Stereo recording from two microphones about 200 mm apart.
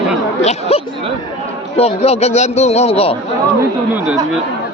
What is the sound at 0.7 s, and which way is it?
Hubbub, 30° left (ahead or behind).